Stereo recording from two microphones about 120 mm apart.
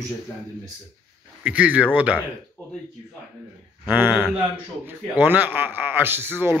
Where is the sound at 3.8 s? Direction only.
15° right (ahead or behind).